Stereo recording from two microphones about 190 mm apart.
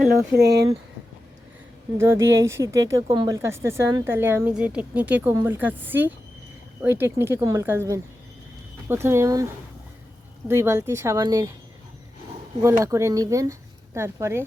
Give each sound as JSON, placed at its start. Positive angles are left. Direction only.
{"t": 0.1, "sound": "speech", "side_deg": -60}
{"t": 2.0, "sound": "speech", "side_deg": -15}
{"t": 10.5, "sound": "speech", "side_deg": -15}
{"t": 12.6, "sound": "speech", "side_deg": -15}